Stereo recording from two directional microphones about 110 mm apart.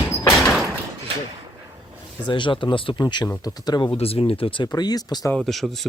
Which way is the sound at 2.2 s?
45° left (ahead or behind).